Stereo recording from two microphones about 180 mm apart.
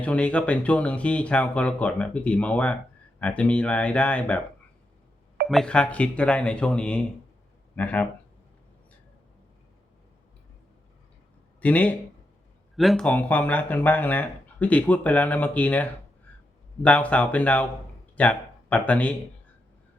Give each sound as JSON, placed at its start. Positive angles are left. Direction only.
{"t": 0.0, "sound": "speech", "side_deg": 5}
{"t": 5.5, "sound": "speech", "side_deg": 5}
{"t": 11.6, "sound": "speech", "side_deg": 10}